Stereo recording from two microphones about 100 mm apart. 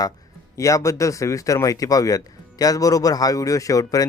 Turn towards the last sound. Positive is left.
turn(degrees=35)  # may be behind; listen again after turning